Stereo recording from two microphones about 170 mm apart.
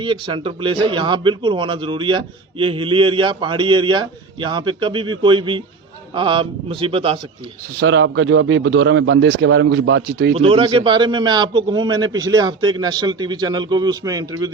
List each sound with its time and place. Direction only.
0.0 s a man's voice: 30° right (ahead or behind)
7.8 s a man's voice: 90° right
10.3 s a man's voice: 30° right (ahead or behind)